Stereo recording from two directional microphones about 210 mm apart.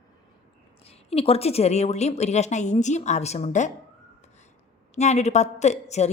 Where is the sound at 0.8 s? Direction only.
30° left (ahead or behind).